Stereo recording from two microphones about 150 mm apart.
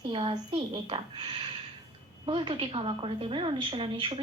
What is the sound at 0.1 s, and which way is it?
Speech, 35° right (ahead or behind).